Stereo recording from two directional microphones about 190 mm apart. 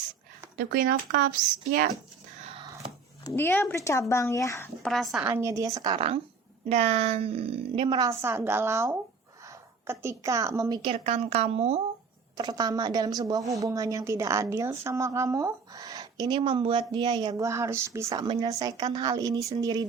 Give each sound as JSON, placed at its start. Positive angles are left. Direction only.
{"t": 0.5, "sound": "speech", "side_deg": -50}
{"t": 3.2, "sound": "speech", "side_deg": 10}
{"t": 4.8, "sound": "speech", "side_deg": 0}
{"t": 5.1, "sound": "a woman's voice", "side_deg": -10}
{"t": 10.9, "sound": "a woman's voice", "side_deg": -35}
{"t": 12.4, "sound": "a woman's voice", "side_deg": -20}